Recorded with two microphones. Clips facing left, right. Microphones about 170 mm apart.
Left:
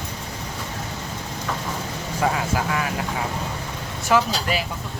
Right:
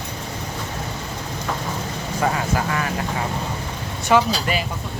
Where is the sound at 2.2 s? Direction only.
5° left (ahead or behind).